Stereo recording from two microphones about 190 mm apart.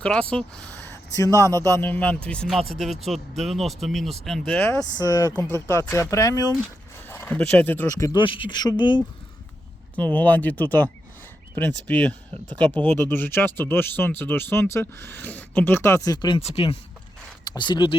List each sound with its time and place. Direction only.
0.0 s speech: 5° left (ahead or behind); by 9.0 s 25° left (ahead or behind)
9.9 s speech: 10° left (ahead or behind); by 17.9 s 25° left (ahead or behind)